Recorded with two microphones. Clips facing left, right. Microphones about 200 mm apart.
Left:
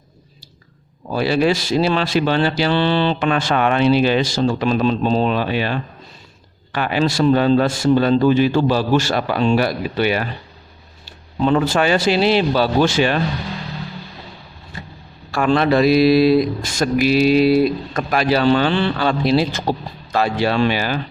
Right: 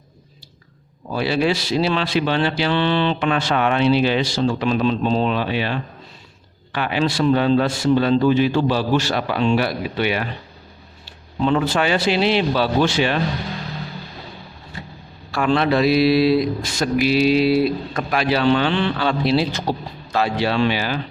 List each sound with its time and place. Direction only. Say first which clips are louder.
1.1 s speech: left 3 dB; 45° left (ahead or behind)
11.4 s speech: left 2 dB; 45° left (ahead or behind)
15.3 s speech: left 2 dB; 45° left (ahead or behind)